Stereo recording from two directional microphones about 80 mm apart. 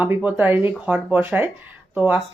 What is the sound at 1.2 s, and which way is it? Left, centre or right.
Speech, right.